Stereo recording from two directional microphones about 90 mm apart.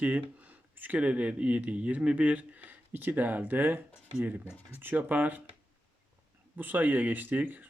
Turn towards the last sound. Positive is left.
turn(degrees=-20)  # may be behind; listen again after turning